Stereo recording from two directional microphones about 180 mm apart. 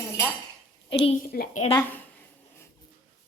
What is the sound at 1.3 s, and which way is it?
Speech, 55° left (ahead or behind).